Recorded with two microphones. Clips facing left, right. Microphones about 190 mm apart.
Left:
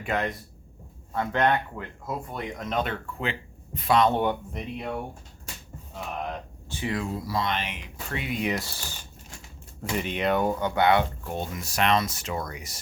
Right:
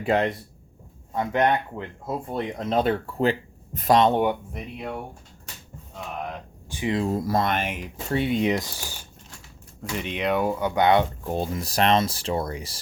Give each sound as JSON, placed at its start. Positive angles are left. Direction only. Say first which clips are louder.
{"t": 0.0, "sound": "speech", "louder": "right 6 dB", "side_deg": -30}
{"t": 1.1, "sound": "speech", "louder": "right 2 dB", "side_deg": -15}
{"t": 4.0, "sound": "speech", "louder": "right 3 dB", "side_deg": -15}
{"t": 6.7, "sound": "speech", "louder": "right 4 dB", "side_deg": -15}
{"t": 7.0, "sound": "speech", "louder": "right 6 dB", "side_deg": -45}
{"t": 8.1, "sound": "speech", "louder": "right 6 dB", "side_deg": -30}
{"t": 10.0, "sound": "speech", "louder": "right 1 dB", "side_deg": 0}
{"t": 10.8, "sound": "speech", "louder": "right 3 dB", "side_deg": -20}
{"t": 11.3, "sound": "speech", "louder": "right 5 dB", "side_deg": -35}